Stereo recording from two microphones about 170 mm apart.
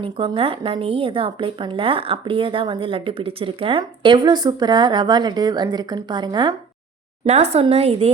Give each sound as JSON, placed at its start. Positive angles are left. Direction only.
{"t": 0.0, "sound": "speech", "side_deg": -30}
{"t": 7.3, "sound": "speech", "side_deg": -40}